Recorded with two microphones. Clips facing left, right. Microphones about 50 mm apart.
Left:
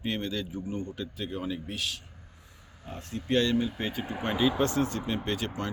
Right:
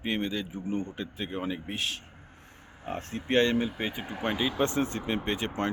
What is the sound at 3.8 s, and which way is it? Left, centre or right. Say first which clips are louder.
Speech: even; centre.